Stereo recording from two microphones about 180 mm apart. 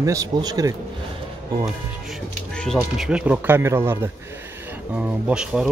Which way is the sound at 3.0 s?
5° right (ahead or behind).